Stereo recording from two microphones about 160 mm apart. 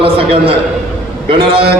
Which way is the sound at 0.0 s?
35° right (ahead or behind).